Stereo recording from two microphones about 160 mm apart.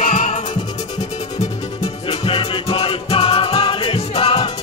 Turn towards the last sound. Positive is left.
turn(degrees=40)  # may be behind; listen again after turning